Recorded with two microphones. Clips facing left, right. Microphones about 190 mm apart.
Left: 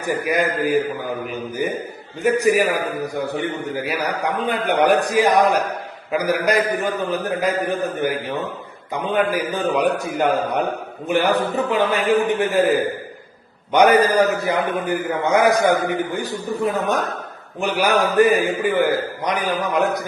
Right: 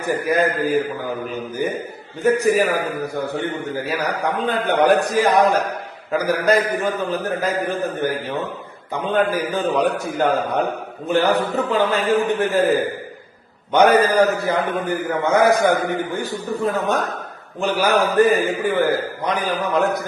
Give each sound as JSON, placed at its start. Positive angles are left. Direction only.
{"t": 0.0, "sound": "a man's voice", "side_deg": 15}
{"t": 13.7, "sound": "a man's voice", "side_deg": 15}